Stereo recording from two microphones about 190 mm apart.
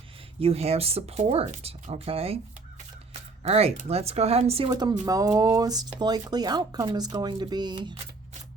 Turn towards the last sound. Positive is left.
turn(degrees=-25)  # may be behind; listen again after turning